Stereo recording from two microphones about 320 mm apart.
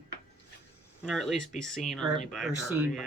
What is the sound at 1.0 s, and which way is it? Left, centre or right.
Speech, centre.